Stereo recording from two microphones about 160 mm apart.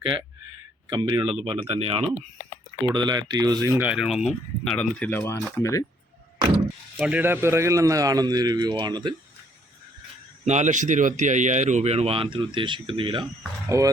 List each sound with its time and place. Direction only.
0.9 s a man's voice: 25° right (ahead or behind); by 5.8 s 20° left (ahead or behind)
7.0 s a man's voice: 10° right (ahead or behind); by 9.1 s 25° right (ahead or behind)
10.4 s speech: 45° right (ahead or behind)
13.7 s a man's voice: 20° right (ahead or behind)